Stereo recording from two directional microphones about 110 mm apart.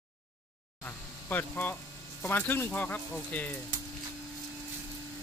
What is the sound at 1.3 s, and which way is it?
Speech, 20° left (ahead or behind).